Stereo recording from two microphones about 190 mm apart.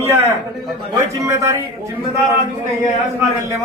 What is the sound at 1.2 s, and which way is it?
Speech, 15° right (ahead or behind).